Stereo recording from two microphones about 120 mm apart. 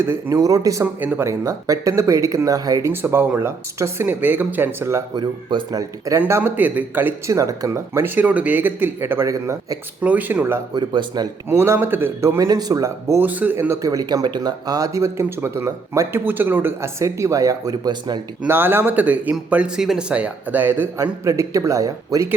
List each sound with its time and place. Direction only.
0.0 s speech: 25° right (ahead or behind)
2.9 s speech: 15° right (ahead or behind)
5.1 s speech: 35° right (ahead or behind)
6.1 s speech: 20° right (ahead or behind)
10.0 s speech: 15° right (ahead or behind)
10.8 s speech: 35° right (ahead or behind)
11.4 s speech: 20° right (ahead or behind)
18.4 s speech: 20° right (ahead or behind)
21.0 s speech: 25° right (ahead or behind)